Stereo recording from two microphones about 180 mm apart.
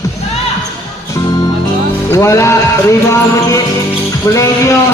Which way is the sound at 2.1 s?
15° left (ahead or behind).